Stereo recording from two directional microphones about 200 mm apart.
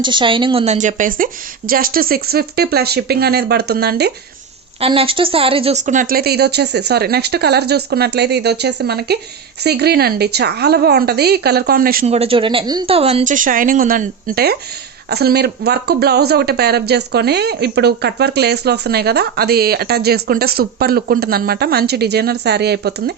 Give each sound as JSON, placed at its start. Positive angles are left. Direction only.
{"t": 0.0, "sound": "speech", "side_deg": -25}
{"t": 4.8, "sound": "speech", "side_deg": -25}
{"t": 12.0, "sound": "speech", "side_deg": -30}